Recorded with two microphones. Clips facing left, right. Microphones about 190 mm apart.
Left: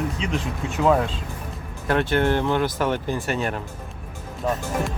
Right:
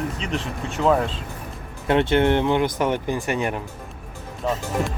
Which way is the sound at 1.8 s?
20° right (ahead or behind).